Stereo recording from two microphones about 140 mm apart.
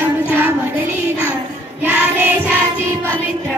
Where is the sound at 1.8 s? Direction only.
10° right (ahead or behind).